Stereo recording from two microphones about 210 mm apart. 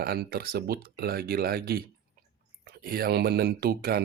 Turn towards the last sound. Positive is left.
turn(degrees=-45)  # may be behind; listen again after turning